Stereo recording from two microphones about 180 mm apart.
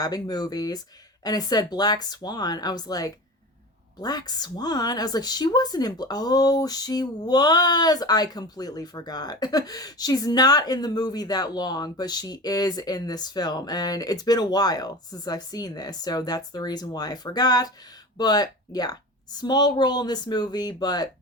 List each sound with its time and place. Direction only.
0.0 s speech: 20° left (ahead or behind)